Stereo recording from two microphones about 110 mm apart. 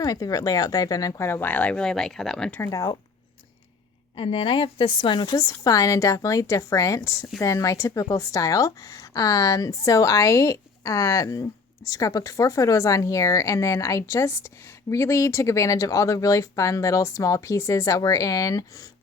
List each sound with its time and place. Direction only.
0.0 s speech: 35° left (ahead or behind); by 2.5 s 5° left (ahead or behind)
2.5 s speech: 25° left (ahead or behind)
4.1 s a woman's voice: 55° left (ahead or behind); by 18.9 s 30° left (ahead or behind)